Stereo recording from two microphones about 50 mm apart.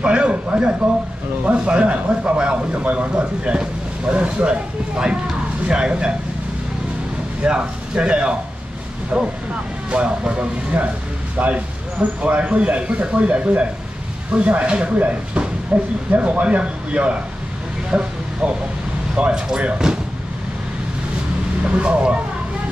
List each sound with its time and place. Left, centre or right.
0.0 s speech: right
7.4 s speech: right
21.6 s speech: right